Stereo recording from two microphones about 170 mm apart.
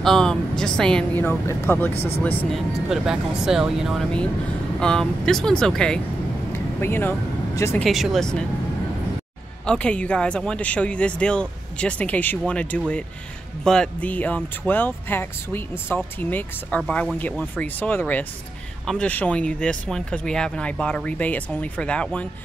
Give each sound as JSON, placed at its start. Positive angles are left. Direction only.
{"t": 0.0, "sound": "speech", "side_deg": 5}
{"t": 2.0, "sound": "speech", "side_deg": 35}
{"t": 2.2, "sound": "speech", "side_deg": 10}
{"t": 2.9, "sound": "speech", "side_deg": -5}
{"t": 7.8, "sound": "speech", "side_deg": 0}
{"t": 9.7, "sound": "speech", "side_deg": 5}